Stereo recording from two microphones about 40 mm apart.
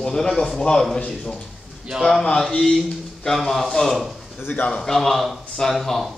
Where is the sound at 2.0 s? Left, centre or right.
Centre.